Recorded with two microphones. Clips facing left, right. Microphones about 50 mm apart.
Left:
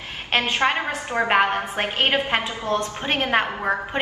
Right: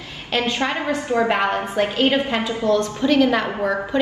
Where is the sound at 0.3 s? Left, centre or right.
Left.